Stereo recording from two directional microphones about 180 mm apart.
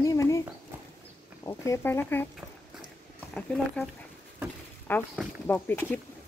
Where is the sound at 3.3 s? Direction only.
5° left (ahead or behind).